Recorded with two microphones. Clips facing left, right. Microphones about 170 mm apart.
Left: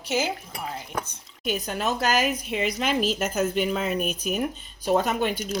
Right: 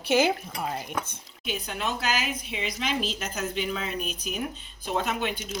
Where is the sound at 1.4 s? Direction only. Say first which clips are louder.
Left 5 dB; 45° left (ahead or behind).